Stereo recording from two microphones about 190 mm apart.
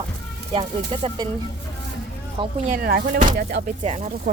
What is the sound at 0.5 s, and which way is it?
Speech, 30° right (ahead or behind).